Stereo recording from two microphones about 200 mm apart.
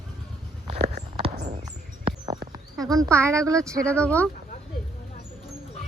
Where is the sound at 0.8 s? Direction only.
35° right (ahead or behind).